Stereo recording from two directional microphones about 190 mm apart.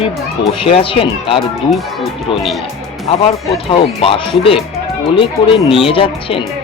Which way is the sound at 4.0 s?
30° left (ahead or behind).